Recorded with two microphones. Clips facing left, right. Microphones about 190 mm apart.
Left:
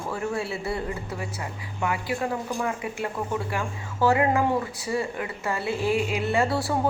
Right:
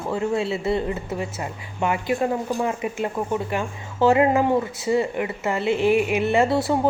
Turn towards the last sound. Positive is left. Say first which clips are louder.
# right 5 dB
turn(degrees=-20)  # may be behind; listen again after turning